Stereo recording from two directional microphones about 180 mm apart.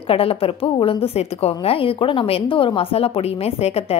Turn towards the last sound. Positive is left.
turn(degrees=35)  # may be behind; listen again after turning